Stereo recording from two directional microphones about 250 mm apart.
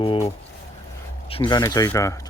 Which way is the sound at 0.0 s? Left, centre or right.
Left.